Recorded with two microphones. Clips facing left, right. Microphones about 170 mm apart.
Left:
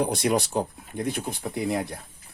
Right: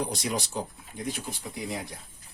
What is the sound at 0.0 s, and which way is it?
Speech, 60° left (ahead or behind).